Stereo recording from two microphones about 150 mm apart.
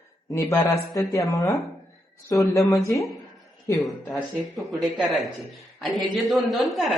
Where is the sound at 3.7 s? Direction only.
Centre (ahead or behind).